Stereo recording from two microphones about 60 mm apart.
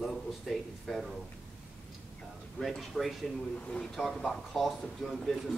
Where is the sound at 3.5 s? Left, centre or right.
Centre.